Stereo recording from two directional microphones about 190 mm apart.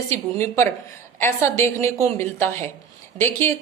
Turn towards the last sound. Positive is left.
turn(degrees=10)  # may be behind; listen again after turning